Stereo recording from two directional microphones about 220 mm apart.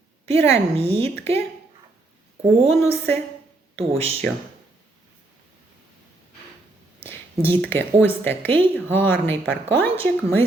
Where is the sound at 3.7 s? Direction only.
25° right (ahead or behind).